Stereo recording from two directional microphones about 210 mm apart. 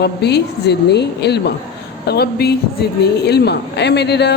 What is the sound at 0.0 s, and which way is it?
A woman's voice, 50° left (ahead or behind).